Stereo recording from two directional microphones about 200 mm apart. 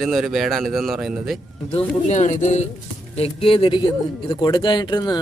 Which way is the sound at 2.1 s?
35° left (ahead or behind).